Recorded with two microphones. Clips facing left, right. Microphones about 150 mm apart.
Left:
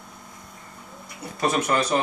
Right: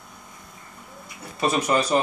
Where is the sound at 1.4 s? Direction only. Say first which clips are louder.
Right 1 dB; 10° right (ahead or behind).